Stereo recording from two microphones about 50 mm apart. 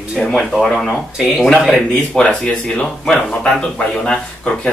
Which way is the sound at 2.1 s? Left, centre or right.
Centre.